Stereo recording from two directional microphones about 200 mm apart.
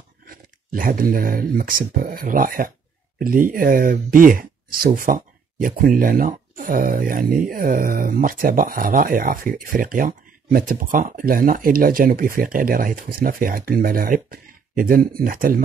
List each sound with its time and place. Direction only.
0.2 s speech: 45° right (ahead or behind)